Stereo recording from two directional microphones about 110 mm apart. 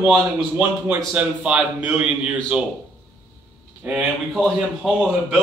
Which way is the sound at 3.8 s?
15° right (ahead or behind).